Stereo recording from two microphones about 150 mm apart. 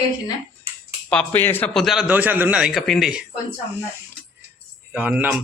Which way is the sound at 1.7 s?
Centre (ahead or behind).